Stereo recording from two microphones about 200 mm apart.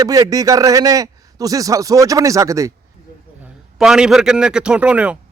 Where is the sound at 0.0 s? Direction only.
15° right (ahead or behind).